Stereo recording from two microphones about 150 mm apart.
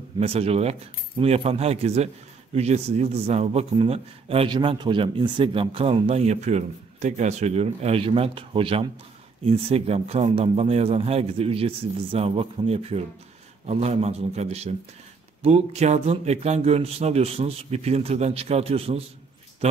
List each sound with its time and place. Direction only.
0.2 s speech: 40° right (ahead or behind)